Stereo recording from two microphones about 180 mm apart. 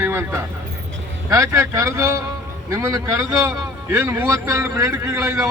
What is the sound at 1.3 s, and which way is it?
A man's voice, 15° right (ahead or behind).